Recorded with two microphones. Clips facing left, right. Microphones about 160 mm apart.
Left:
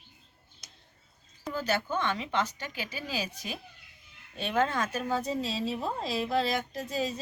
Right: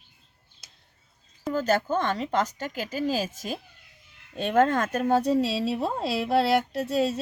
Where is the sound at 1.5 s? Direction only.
45° right (ahead or behind).